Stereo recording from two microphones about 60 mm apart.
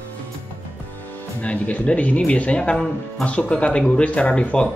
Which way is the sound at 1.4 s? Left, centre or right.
Left.